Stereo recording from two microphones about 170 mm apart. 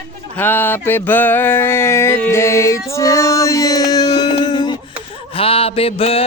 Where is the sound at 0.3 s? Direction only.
10° left (ahead or behind).